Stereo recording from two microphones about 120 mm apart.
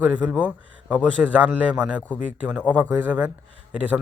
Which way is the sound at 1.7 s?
15° right (ahead or behind).